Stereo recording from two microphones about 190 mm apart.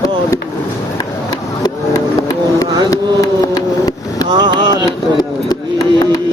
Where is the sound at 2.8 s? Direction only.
20° left (ahead or behind).